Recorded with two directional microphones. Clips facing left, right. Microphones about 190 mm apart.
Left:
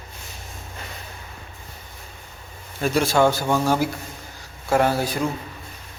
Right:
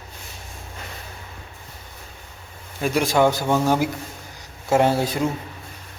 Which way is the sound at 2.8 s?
15° right (ahead or behind).